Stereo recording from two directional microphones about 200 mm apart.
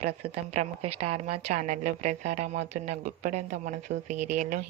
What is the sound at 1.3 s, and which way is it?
A woman's voice, 35° right (ahead or behind).